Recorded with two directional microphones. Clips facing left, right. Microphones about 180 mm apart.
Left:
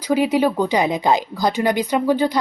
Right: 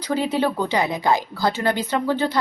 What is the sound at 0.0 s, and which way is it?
A woman's voice, 10° left (ahead or behind).